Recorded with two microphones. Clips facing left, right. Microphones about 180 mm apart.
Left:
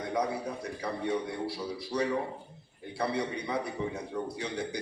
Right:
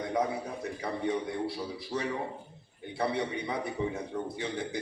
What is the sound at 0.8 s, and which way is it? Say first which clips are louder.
A man's voice: right 1 dB; 25° right (ahead or behind).